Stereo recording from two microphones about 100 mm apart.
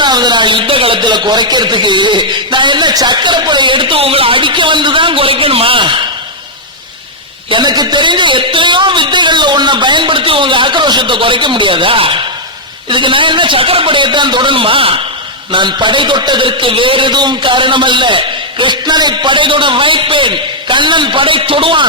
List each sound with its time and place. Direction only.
0.0 s speech: 45° right (ahead or behind)
7.5 s a man's voice: 45° right (ahead or behind); by 15.0 s 65° right (ahead or behind)
15.5 s a man's voice: 50° right (ahead or behind)